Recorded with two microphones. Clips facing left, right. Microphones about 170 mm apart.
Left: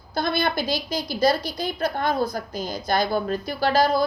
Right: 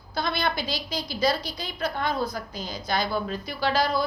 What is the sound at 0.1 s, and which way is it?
A woman's voice, 45° left (ahead or behind).